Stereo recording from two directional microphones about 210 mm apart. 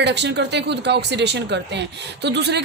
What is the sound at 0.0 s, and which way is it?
Speech, 55° right (ahead or behind).